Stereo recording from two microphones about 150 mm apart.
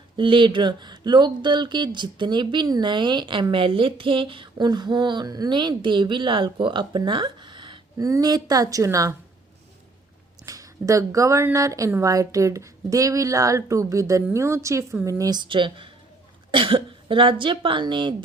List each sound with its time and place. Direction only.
0.2 s speech: 35° right (ahead or behind)
10.4 s speech: 20° right (ahead or behind)